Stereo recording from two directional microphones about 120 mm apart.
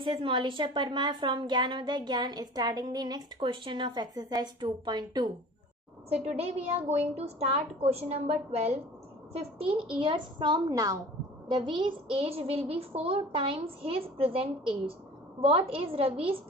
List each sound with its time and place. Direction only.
0.0 s a woman's voice: 45° right (ahead or behind)
3.3 s a woman's voice: 45° right (ahead or behind)
6.0 s a woman's voice: 60° right (ahead or behind)
9.3 s a woman's voice: 50° right (ahead or behind)